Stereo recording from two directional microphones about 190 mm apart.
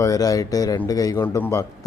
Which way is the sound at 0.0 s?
20° left (ahead or behind).